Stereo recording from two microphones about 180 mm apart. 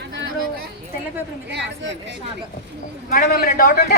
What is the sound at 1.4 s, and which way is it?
Speech, 80° right.